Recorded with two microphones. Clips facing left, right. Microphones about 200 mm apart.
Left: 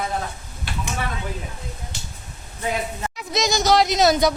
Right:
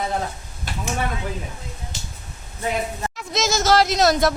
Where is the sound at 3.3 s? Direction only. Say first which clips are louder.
Even; centre (ahead or behind).